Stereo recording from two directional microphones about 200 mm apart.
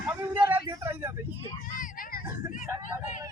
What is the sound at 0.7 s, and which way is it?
Vehicle, 10° right (ahead or behind).